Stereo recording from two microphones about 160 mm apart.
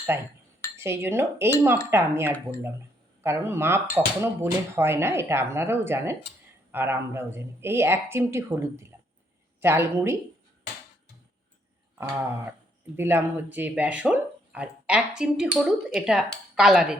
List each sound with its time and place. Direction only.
0.1 s speech: 15° right (ahead or behind)
11.9 s speech: 15° right (ahead or behind)